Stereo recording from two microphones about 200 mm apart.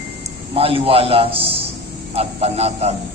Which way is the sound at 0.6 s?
30° right (ahead or behind).